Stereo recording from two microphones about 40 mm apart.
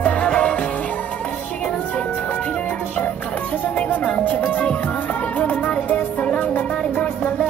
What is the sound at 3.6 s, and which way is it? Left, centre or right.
Music, left.